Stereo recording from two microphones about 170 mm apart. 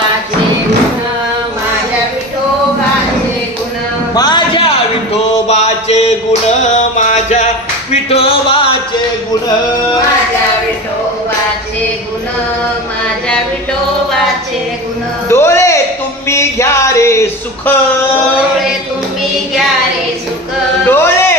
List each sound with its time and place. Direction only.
4.1 s music: 25° left (ahead or behind)
5.5 s mantra: 40° left (ahead or behind)
7.1 s music: 45° left (ahead or behind)
15.2 s music: 15° left (ahead or behind)
16.3 s a sound: 15° left (ahead or behind)
20.8 s music: 15° left (ahead or behind)